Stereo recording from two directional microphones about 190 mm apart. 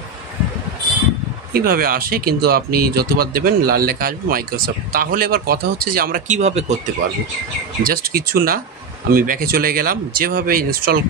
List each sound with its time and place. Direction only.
1.5 s speech: 50° right (ahead or behind)
7.8 s speech: 50° right (ahead or behind)